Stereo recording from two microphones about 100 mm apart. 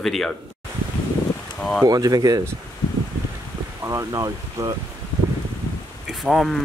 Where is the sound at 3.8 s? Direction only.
35° right (ahead or behind).